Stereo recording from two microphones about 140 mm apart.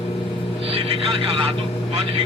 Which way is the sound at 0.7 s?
40° right (ahead or behind).